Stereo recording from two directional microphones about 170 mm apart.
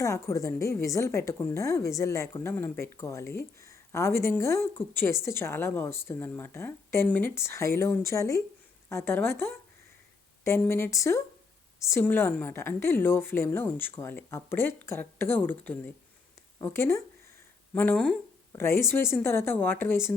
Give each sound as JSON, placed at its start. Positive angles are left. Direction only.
{"t": 0.0, "sound": "a woman's voice", "side_deg": 20}
{"t": 17.9, "sound": "speech", "side_deg": 0}
{"t": 18.5, "sound": "a woman's voice", "side_deg": 15}